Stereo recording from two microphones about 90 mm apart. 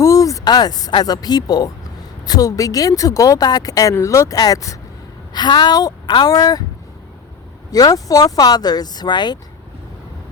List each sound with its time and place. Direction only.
0.0 s a sound: 40° left (ahead or behind)
0.9 s speech: 55° left (ahead or behind); by 4.8 s 40° left (ahead or behind)
5.3 s speech: 55° left (ahead or behind)
7.7 s speech: 45° left (ahead or behind)